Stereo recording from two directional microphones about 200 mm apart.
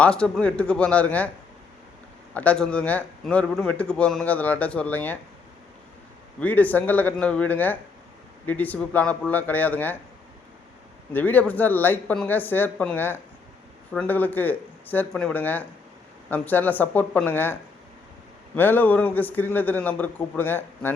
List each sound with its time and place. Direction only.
0.0 s a man's voice: 5° left (ahead or behind)
2.3 s a man's voice: 5° left (ahead or behind)
6.4 s a man's voice: 10° left (ahead or behind)
11.1 s a man's voice: 10° left (ahead or behind)